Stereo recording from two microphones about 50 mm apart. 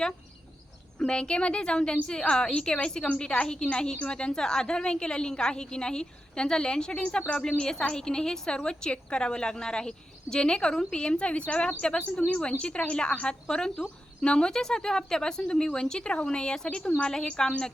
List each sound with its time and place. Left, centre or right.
0.9 s a woman's voice: centre